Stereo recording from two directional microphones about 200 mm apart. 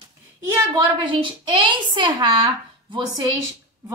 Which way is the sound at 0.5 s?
25° right (ahead or behind).